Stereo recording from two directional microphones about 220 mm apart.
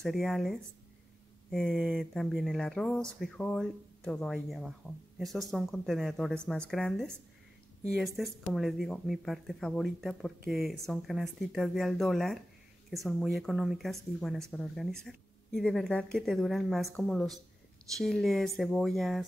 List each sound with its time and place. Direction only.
0.0 s speech: centre (ahead or behind)